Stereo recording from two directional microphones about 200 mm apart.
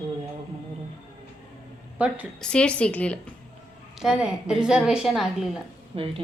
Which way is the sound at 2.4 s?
5° left (ahead or behind).